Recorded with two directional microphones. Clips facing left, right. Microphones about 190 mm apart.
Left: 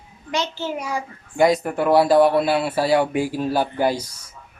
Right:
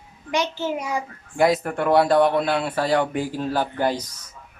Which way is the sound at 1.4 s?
Centre (ahead or behind).